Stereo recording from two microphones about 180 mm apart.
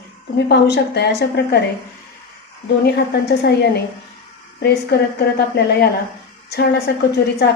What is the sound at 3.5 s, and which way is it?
Speech, 65° left (ahead or behind).